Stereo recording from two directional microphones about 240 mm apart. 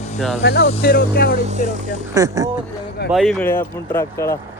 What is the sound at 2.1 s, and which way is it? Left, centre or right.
Speech, centre.